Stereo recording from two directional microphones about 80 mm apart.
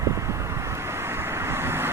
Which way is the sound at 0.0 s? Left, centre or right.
Right.